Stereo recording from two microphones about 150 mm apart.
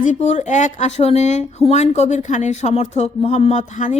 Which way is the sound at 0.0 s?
50° left (ahead or behind).